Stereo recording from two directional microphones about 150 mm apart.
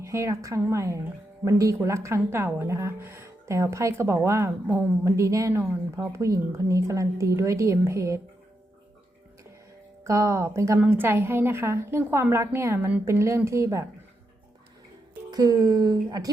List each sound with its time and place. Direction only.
0.0 s a woman's voice: 20° right (ahead or behind)
10.1 s a woman's voice: 20° right (ahead or behind)
15.3 s a woman's voice: 25° right (ahead or behind)